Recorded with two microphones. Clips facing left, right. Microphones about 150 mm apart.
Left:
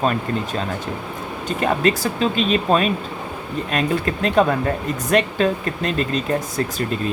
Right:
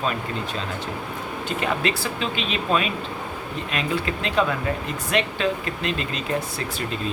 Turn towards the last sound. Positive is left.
turn(degrees=45)  # may be behind; listen again after turning